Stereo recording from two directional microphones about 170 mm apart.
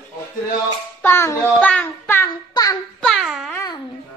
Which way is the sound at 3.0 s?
Centre (ahead or behind).